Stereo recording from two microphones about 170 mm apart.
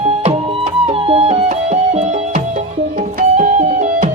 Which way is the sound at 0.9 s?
35° right (ahead or behind).